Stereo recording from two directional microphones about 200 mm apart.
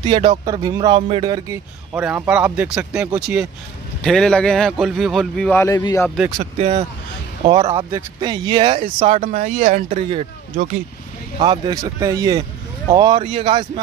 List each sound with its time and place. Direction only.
0.0 s speech: 25° right (ahead or behind)
2.0 s speech: 5° right (ahead or behind); by 6.0 s 15° left (ahead or behind)
6.0 s speech: centre (ahead or behind)
7.4 s speech: 20° right (ahead or behind); by 10.0 s 40° right (ahead or behind)
11.3 s speech: 25° right (ahead or behind)